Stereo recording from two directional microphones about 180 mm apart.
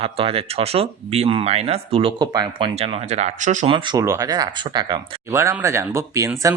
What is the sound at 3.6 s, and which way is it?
Speech, 25° right (ahead or behind).